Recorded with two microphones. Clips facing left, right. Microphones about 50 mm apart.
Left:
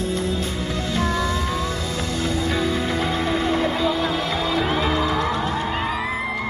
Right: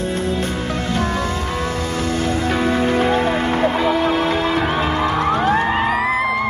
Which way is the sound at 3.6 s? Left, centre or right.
Right.